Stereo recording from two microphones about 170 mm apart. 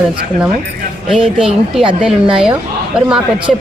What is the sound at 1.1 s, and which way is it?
Speech, 5° right (ahead or behind).